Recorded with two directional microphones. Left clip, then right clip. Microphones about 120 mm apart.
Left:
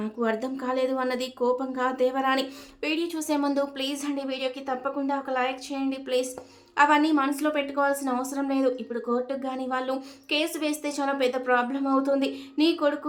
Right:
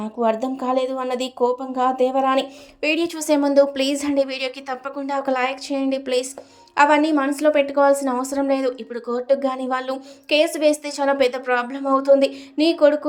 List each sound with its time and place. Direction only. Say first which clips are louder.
0.0 s speech: right 7 dB; 30° right (ahead or behind)
2.9 s a woman's voice: right 7 dB; 45° right (ahead or behind)